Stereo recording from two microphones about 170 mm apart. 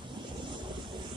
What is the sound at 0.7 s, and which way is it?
Vehicle, 25° right (ahead or behind).